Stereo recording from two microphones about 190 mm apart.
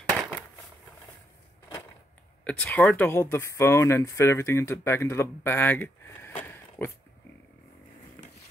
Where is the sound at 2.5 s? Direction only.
5° left (ahead or behind).